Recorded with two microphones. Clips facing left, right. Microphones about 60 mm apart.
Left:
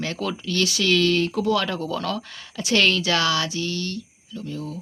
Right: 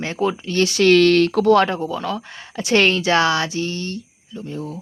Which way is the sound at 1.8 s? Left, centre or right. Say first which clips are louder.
Right 2 dB; centre.